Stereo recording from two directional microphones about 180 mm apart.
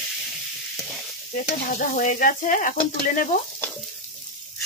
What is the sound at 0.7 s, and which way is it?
Frying, 5° left (ahead or behind).